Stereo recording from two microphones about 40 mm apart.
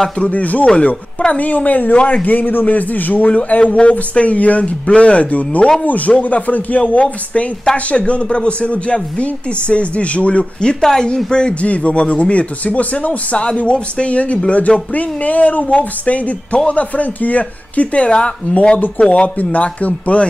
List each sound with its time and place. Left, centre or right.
0.2 s a man's voice: left
11.6 s speech: left